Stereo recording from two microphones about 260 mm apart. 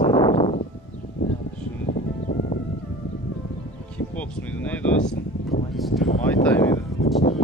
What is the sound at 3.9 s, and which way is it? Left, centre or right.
Speech, centre.